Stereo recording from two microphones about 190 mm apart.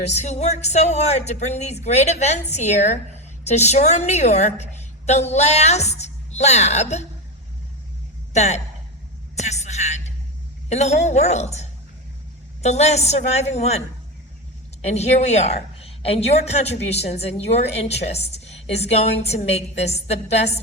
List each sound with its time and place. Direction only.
0.2 s a woman's voice: 35° left (ahead or behind)
8.3 s a woman's voice: 35° left (ahead or behind)